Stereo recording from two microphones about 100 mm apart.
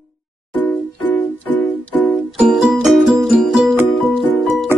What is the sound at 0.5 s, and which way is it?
Music, 5° left (ahead or behind).